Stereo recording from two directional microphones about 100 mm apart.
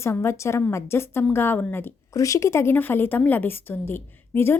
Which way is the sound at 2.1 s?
35° left (ahead or behind).